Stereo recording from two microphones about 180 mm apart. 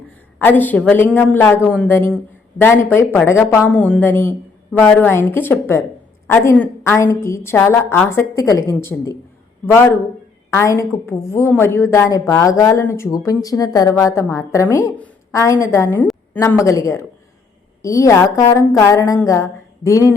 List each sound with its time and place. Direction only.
0.3 s a woman's voice: 10° left (ahead or behind)
10.5 s a woman's voice: 15° left (ahead or behind)